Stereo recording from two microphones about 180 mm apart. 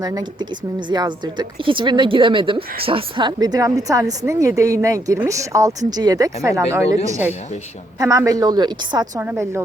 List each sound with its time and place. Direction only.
0.0 s a woman's voice: 20° right (ahead or behind)